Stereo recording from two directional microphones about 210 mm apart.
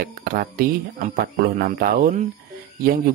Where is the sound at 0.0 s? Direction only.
45° right (ahead or behind).